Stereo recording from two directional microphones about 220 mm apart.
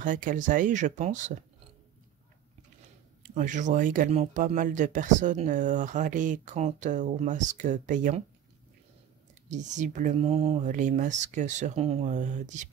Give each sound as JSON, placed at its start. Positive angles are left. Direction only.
{"t": 0.0, "sound": "speech", "side_deg": -35}
{"t": 3.3, "sound": "speech", "side_deg": -35}
{"t": 9.5, "sound": "speech", "side_deg": -35}